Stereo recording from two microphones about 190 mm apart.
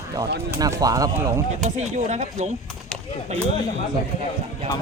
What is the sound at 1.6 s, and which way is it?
Speech, 35° right (ahead or behind).